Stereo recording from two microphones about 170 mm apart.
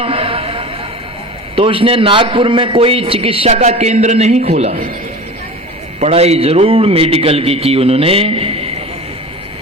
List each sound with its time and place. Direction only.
0.0 s a sound: 35° right (ahead or behind)
1.5 s a man's voice: 30° right (ahead or behind)
6.0 s a man's voice: 40° right (ahead or behind)